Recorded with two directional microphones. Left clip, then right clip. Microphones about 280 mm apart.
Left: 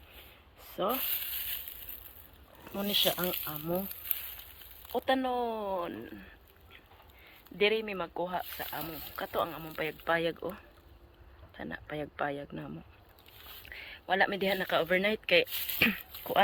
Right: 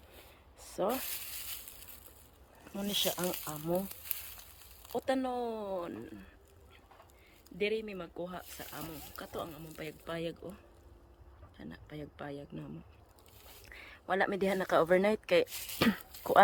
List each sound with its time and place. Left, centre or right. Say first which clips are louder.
0.8 s speech: left 1 dB; centre
2.7 s speech: left 5 dB; centre
4.9 s speech: left 4 dB; centre
7.6 s speech: left 6 dB; centre; by 16.4 s right